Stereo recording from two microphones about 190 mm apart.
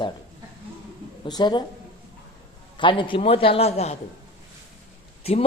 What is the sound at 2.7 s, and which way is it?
A man's voice, 25° left (ahead or behind).